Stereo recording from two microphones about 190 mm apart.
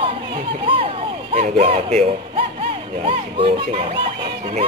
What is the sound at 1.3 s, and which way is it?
Speech, 30° right (ahead or behind).